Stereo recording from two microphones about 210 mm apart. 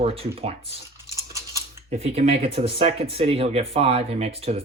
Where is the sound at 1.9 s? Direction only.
30° right (ahead or behind).